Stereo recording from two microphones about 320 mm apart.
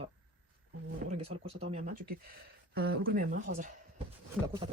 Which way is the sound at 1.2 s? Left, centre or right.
Centre.